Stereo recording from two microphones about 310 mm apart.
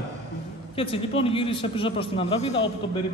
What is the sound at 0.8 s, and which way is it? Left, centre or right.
A man's voice, centre.